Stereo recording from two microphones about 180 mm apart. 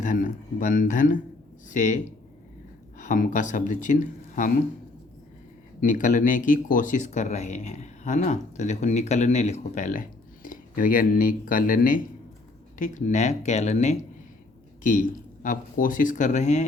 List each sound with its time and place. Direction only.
0.0 s speech: 45° left (ahead or behind)
3.0 s speech: 45° left (ahead or behind)
5.8 s speech: 45° left (ahead or behind)